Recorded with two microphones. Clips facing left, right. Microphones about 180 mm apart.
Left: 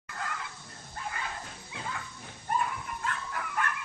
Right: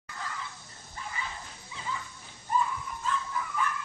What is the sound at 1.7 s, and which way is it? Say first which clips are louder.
Dog: right 2 dB; 60° left (ahead or behind).